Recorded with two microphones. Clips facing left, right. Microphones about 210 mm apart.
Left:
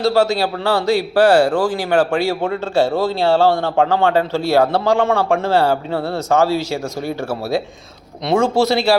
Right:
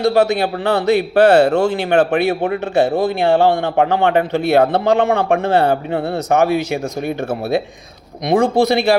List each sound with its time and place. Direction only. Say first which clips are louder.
0.0 s speech: right 1 dB; 20° right (ahead or behind)
8.2 s speech: right 2 dB; 15° right (ahead or behind)